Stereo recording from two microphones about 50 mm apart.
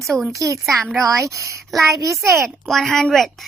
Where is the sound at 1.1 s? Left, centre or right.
Right.